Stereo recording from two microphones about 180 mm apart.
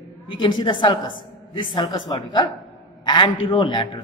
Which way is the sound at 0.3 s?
25° left (ahead or behind).